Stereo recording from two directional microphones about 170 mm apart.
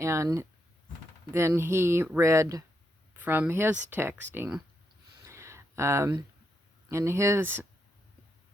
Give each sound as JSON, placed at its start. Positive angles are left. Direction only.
{"t": 0.0, "sound": "speech", "side_deg": -15}
{"t": 5.2, "sound": "a sound", "side_deg": -15}
{"t": 6.8, "sound": "speech", "side_deg": -15}